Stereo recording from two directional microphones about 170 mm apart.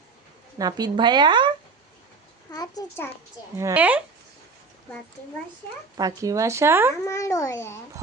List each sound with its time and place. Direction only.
0.6 s speech: 25° right (ahead or behind)
2.5 s a child's voice: 20° left (ahead or behind)
3.6 s speech: 15° right (ahead or behind)
6.0 s speech: 20° right (ahead or behind)
7.0 s a child's voice: 20° left (ahead or behind)